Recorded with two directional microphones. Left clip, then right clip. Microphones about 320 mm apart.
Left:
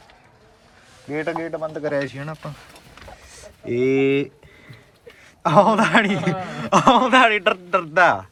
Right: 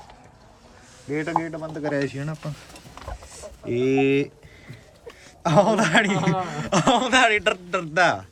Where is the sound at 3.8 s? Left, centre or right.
Centre.